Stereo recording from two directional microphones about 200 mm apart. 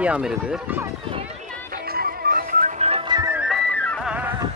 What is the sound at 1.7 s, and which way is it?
Music, 50° right (ahead or behind).